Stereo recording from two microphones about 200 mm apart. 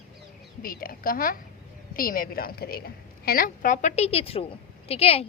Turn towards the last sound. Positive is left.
turn(degrees=30)  # may be behind; listen again after turning